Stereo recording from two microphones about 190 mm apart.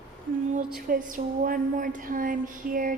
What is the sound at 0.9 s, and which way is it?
A woman's voice, 45° right (ahead or behind).